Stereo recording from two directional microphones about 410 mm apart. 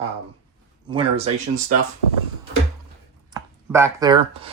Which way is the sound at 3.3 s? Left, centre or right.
Centre.